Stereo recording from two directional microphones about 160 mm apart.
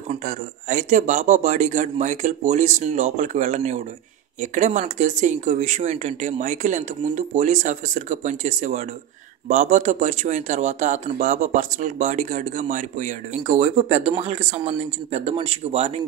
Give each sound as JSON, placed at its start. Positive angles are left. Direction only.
{"t": 0.1, "sound": "speech", "side_deg": -50}